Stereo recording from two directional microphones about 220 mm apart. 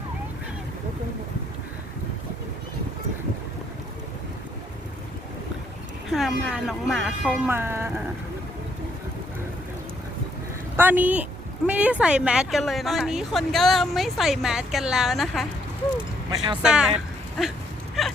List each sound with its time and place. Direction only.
6.1 s speech: centre (ahead or behind)
10.8 s speech: 10° right (ahead or behind)
16.3 s speech: 20° right (ahead or behind)
16.6 s speech: 5° right (ahead or behind)
18.0 s a sound: centre (ahead or behind)